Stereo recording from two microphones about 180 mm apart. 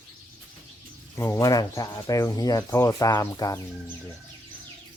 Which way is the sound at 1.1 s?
15° left (ahead or behind).